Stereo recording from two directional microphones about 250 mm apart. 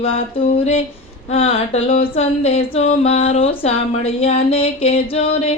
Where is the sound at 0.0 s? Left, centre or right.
Left.